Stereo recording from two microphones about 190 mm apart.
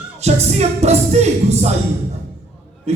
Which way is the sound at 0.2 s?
35° right (ahead or behind).